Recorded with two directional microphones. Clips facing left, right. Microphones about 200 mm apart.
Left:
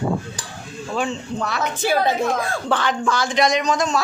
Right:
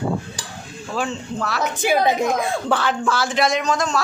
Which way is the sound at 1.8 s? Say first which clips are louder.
Right 1 dB; 15° right (ahead or behind).